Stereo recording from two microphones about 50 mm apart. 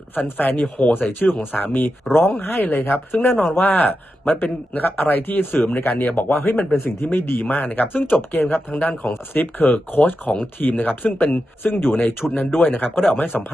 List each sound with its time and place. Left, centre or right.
0.1 s speech: left